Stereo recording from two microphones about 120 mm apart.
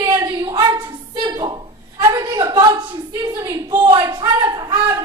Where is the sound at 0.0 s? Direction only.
30° right (ahead or behind).